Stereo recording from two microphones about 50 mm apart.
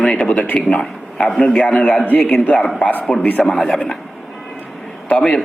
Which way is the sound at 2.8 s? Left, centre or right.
Left.